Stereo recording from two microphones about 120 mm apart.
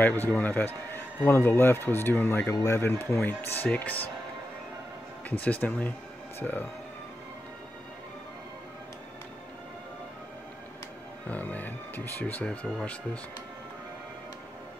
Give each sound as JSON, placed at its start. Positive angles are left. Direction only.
{"t": 0.0, "sound": "speech", "side_deg": 15}
{"t": 5.3, "sound": "speech", "side_deg": 15}
{"t": 11.2, "sound": "speech", "side_deg": 15}